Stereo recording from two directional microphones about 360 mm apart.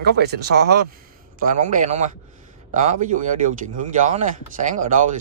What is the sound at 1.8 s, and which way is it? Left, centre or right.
A man's voice, centre.